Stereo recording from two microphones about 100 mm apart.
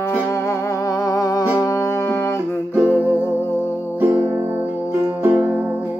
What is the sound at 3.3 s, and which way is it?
Music, 25° left (ahead or behind).